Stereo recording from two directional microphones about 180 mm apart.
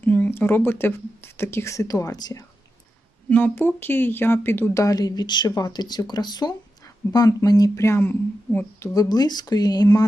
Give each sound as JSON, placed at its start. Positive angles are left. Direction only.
{"t": 0.0, "sound": "speech", "side_deg": 10}